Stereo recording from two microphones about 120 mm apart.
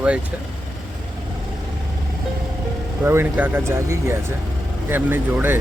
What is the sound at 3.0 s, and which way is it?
Speech, 20° right (ahead or behind).